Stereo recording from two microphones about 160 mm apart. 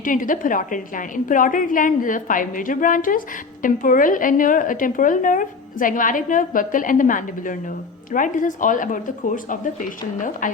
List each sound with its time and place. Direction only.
0.0 s a woman's voice: 55° left (ahead or behind)